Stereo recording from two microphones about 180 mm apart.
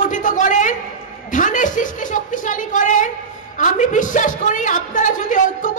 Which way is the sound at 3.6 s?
45° left (ahead or behind).